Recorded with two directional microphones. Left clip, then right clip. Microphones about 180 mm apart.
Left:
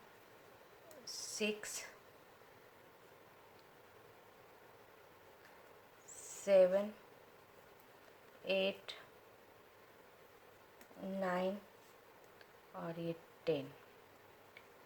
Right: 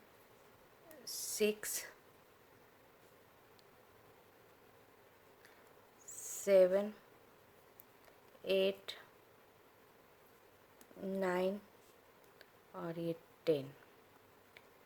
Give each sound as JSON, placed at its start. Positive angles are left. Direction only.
{"t": 1.0, "sound": "a sound", "side_deg": -50}
{"t": 6.3, "sound": "speech", "side_deg": -50}
{"t": 8.4, "sound": "speech", "side_deg": -55}
{"t": 11.2, "sound": "speech", "side_deg": -55}
{"t": 12.7, "sound": "speech", "side_deg": -50}